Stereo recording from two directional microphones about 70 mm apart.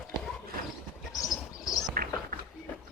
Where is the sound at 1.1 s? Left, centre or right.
Left.